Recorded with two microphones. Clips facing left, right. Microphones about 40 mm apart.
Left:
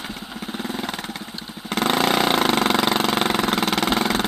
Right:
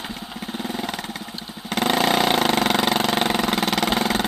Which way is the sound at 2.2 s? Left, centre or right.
Left.